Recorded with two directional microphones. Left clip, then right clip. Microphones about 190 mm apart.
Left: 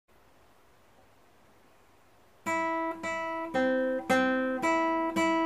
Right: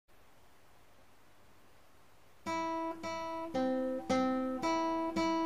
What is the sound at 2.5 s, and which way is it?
Guitar, 20° left (ahead or behind).